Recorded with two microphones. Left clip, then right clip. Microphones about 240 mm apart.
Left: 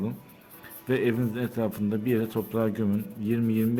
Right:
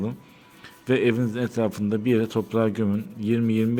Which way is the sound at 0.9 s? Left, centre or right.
Centre.